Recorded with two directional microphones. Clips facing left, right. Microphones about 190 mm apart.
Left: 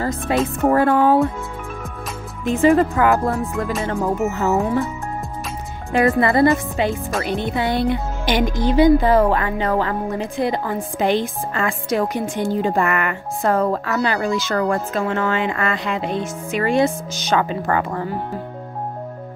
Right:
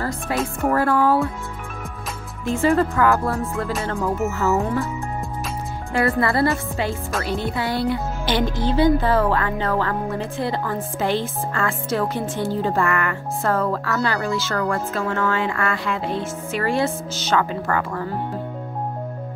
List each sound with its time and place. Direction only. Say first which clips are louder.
0.0 s music: left 4 dB; 20° left (ahead or behind)
0.7 s speech: left 3 dB; 20° left (ahead or behind)
2.4 s speech: left 4 dB; 20° left (ahead or behind)
5.9 s speech: left 4 dB; 20° left (ahead or behind)